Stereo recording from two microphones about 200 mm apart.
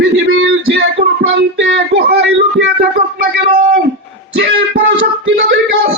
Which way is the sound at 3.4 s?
45° right (ahead or behind).